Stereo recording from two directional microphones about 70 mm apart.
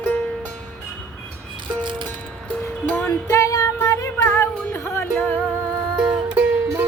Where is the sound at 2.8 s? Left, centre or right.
Left.